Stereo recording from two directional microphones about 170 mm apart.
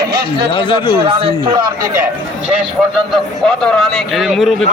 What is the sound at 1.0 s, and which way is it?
Speech, 35° right (ahead or behind).